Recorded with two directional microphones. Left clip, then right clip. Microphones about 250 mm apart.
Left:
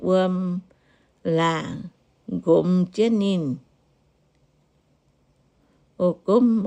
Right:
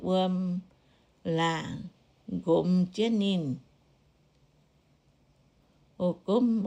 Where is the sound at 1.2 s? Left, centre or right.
Left.